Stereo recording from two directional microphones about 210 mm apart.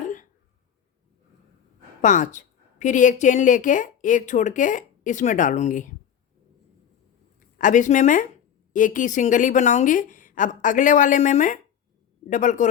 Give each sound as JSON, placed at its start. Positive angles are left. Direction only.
{"t": 0.0, "sound": "a sound", "side_deg": 35}
{"t": 2.0, "sound": "a woman's voice", "side_deg": 35}
{"t": 7.3, "sound": "a woman's voice", "side_deg": 35}